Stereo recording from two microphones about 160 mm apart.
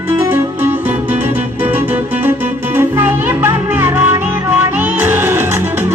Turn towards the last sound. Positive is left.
turn(degrees=-15)  # may be behind; listen again after turning